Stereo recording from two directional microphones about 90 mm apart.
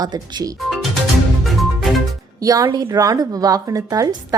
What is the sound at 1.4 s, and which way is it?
Music, centre (ahead or behind).